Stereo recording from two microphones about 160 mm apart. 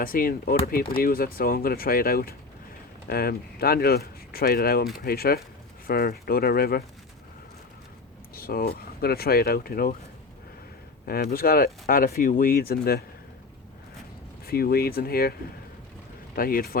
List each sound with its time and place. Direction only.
0.0 s speech: 65° left (ahead or behind)
8.4 s speech: 70° left (ahead or behind)
11.0 s speech: 70° left (ahead or behind)
14.4 s speech: 70° left (ahead or behind)
16.3 s speech: 65° left (ahead or behind)